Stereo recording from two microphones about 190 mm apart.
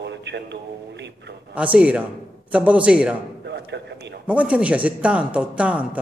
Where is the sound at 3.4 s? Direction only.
65° right (ahead or behind).